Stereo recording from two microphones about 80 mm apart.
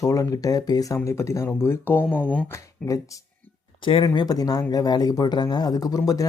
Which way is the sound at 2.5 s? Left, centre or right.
Left.